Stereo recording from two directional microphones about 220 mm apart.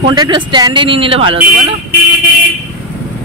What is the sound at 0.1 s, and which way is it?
Speech, 20° right (ahead or behind).